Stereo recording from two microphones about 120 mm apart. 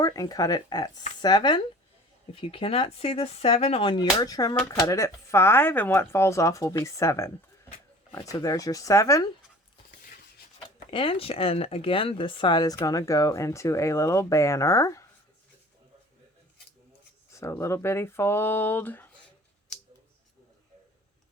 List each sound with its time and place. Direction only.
0.0 s speech: 30° left (ahead or behind)
10.9 s speech: 50° left (ahead or behind); by 15.0 s 25° left (ahead or behind)
17.3 s speech: 25° left (ahead or behind)